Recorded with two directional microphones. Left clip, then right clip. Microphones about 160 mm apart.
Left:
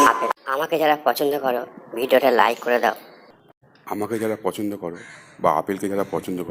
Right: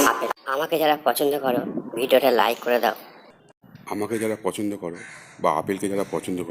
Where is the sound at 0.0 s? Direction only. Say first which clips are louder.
Left 4 dB; centre (ahead or behind).